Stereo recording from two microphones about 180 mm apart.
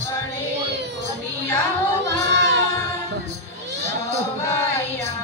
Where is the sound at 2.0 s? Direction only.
75° right (ahead or behind).